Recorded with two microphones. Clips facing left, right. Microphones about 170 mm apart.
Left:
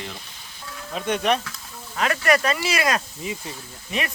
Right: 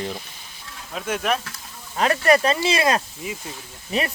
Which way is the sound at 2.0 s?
30° right (ahead or behind).